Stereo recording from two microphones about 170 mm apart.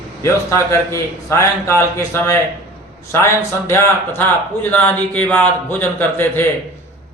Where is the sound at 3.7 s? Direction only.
10° left (ahead or behind).